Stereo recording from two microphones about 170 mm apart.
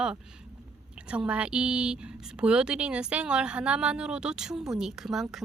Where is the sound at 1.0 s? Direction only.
5° right (ahead or behind).